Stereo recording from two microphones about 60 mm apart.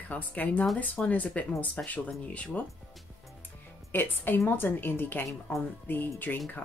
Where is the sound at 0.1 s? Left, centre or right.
Left.